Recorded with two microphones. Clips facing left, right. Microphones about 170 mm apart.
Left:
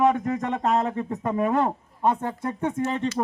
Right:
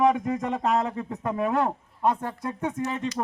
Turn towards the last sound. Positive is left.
turn(degrees=-5)  # may be behind; listen again after turning